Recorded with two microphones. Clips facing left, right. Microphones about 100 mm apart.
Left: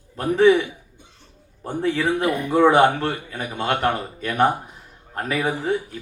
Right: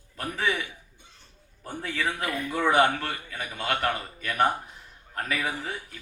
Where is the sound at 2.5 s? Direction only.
35° left (ahead or behind).